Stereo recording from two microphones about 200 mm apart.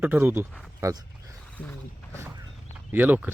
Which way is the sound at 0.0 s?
10° right (ahead or behind).